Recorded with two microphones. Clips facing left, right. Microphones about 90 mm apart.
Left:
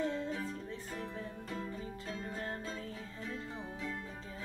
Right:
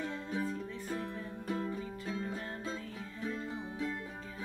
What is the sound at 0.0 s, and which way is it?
Music, 15° right (ahead or behind).